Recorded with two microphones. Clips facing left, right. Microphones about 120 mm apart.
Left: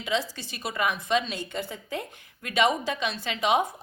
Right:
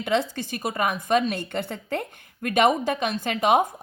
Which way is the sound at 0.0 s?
55° right (ahead or behind).